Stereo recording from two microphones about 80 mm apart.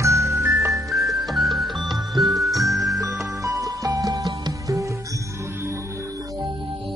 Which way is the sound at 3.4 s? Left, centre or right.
Right.